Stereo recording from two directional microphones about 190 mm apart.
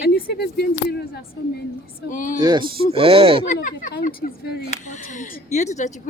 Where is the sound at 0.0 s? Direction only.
60° left (ahead or behind).